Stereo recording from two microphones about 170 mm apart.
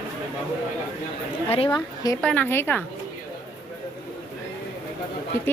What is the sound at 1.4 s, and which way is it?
Speech, 35° left (ahead or behind).